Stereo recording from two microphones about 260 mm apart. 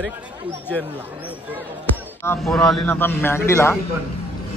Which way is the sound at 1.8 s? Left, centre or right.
Centre.